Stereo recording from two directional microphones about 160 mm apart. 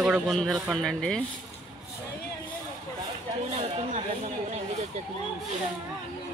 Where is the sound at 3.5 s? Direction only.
40° right (ahead or behind).